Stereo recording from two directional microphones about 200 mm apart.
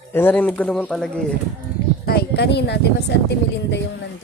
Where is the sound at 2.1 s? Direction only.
55° left (ahead or behind).